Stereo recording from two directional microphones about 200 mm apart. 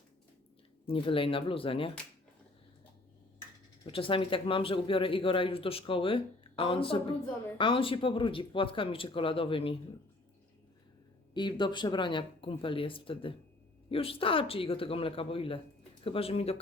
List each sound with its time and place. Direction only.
0.9 s speech: 25° left (ahead or behind)
3.8 s speech: 25° left (ahead or behind)
11.3 s speech: 20° left (ahead or behind)